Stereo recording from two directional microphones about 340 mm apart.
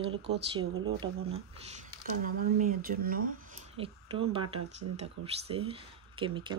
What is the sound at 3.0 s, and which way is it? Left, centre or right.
Speech, right.